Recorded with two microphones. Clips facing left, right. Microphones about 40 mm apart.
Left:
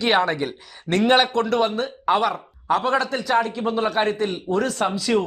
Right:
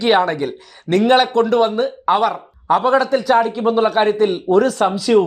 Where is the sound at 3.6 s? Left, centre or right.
Right.